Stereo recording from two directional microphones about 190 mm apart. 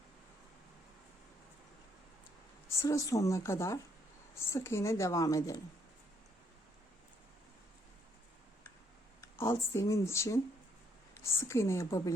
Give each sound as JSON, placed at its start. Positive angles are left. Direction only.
{"t": 2.8, "sound": "a woman's voice", "side_deg": 15}
{"t": 9.2, "sound": "a woman's voice", "side_deg": 15}